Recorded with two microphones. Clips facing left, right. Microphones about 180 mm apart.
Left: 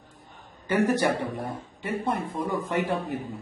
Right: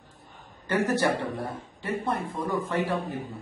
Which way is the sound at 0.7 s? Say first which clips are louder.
Left 2 dB; 15° left (ahead or behind).